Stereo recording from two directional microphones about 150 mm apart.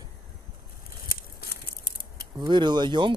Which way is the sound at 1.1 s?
80° left.